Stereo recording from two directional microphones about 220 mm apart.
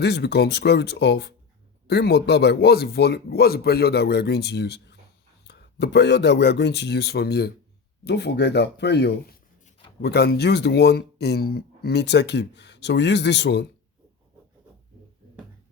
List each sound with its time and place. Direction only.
0.0 s speech: 50° left (ahead or behind)